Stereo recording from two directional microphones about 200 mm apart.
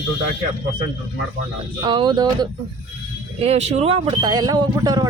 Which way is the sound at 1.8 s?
20° right (ahead or behind).